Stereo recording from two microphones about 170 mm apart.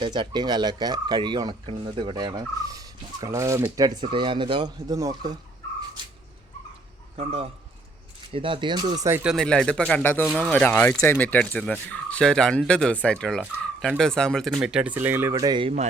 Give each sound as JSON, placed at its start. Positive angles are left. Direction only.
{"t": 0.0, "sound": "speech", "side_deg": -25}
{"t": 7.2, "sound": "a man's voice", "side_deg": -35}
{"t": 9.0, "sound": "speech", "side_deg": -10}
{"t": 9.3, "sound": "speech", "side_deg": 5}
{"t": 13.6, "sound": "fowl", "side_deg": 5}
{"t": 14.0, "sound": "speech", "side_deg": 5}